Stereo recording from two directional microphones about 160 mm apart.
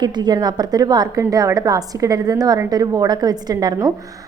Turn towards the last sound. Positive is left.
turn(degrees=-25)  # may be behind; listen again after turning